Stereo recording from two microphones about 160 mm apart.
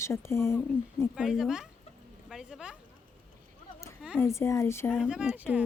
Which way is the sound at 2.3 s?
5° right (ahead or behind).